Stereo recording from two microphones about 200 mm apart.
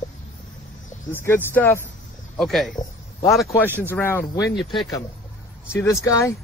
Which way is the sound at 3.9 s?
10° left (ahead or behind).